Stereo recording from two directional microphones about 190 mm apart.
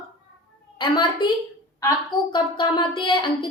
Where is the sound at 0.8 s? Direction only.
25° left (ahead or behind).